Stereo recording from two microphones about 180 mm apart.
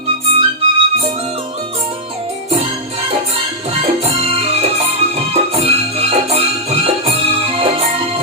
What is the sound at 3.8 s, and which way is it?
Music, 35° right (ahead or behind).